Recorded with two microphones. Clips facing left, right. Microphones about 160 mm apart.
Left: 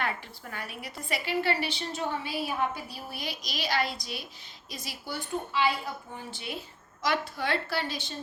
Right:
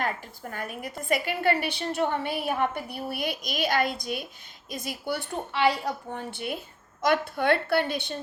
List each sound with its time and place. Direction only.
0.5 s a woman's voice: 50° right (ahead or behind)